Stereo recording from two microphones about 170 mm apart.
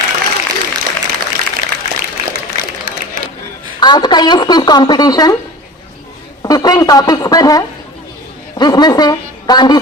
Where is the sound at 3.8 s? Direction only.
25° left (ahead or behind).